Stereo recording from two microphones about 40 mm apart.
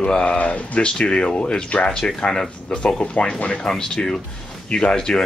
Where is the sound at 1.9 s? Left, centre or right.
Centre.